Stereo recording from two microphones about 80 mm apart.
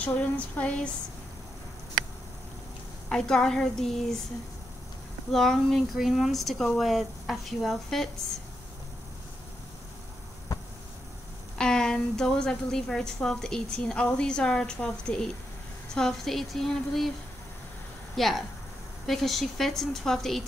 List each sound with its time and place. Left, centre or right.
0.0 s a woman's voice: centre
3.1 s a woman's voice: centre
5.3 s speech: centre
11.5 s a woman's voice: centre
18.1 s speech: centre